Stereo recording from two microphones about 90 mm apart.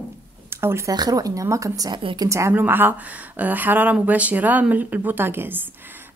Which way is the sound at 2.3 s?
30° right (ahead or behind).